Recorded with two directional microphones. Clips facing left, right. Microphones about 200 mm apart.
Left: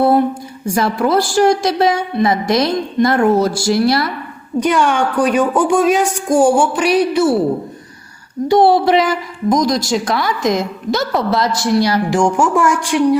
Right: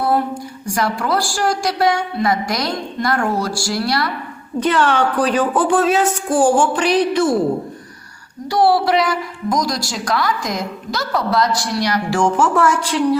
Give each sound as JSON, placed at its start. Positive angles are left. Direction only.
{"t": 0.6, "sound": "a woman's voice", "side_deg": 25}
{"t": 4.6, "sound": "speech", "side_deg": 10}
{"t": 8.4, "sound": "a woman's voice", "side_deg": 20}
{"t": 12.2, "sound": "speech", "side_deg": 15}